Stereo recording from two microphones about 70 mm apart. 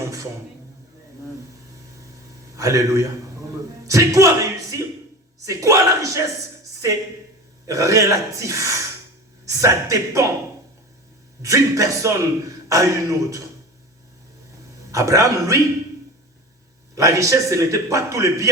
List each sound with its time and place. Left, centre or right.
2.6 s a man's voice: right
5.5 s a man's voice: right
7.7 s a man's voice: right
11.4 s a man's voice: right
14.9 s a man's voice: right
16.9 s a man's voice: right